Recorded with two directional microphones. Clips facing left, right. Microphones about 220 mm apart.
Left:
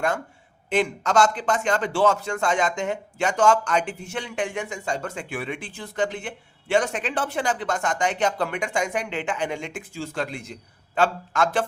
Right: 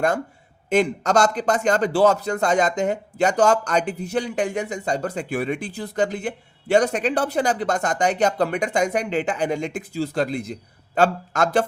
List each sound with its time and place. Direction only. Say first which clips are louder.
0.7 s speech: right 4 dB; 40° right (ahead or behind)